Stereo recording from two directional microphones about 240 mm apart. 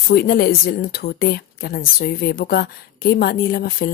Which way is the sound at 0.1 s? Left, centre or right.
Left.